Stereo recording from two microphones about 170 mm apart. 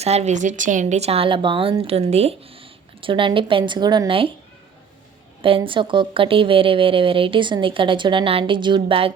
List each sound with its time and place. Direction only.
0.0 s speech: 40° right (ahead or behind)
5.4 s speech: 30° right (ahead or behind)